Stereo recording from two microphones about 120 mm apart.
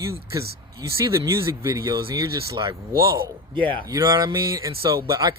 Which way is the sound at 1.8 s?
35° right (ahead or behind).